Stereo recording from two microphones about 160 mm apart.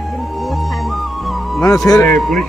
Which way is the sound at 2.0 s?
5° left (ahead or behind).